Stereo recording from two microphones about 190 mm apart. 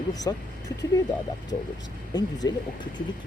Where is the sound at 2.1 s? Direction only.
20° left (ahead or behind).